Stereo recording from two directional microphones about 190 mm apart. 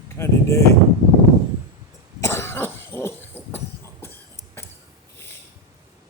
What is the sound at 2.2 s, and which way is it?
Cough, 15° left (ahead or behind).